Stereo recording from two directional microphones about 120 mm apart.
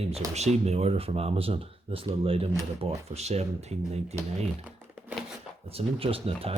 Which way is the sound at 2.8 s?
65° right (ahead or behind).